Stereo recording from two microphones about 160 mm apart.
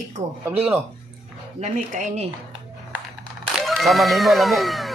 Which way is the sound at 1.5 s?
50° right (ahead or behind).